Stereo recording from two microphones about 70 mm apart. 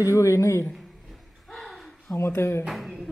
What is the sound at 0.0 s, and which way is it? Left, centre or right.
Speech, left.